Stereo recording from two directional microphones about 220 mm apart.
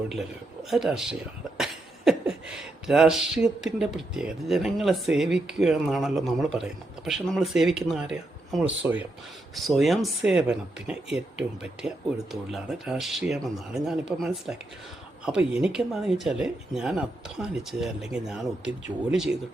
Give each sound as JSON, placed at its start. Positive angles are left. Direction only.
{"t": 0.7, "sound": "speech", "side_deg": 0}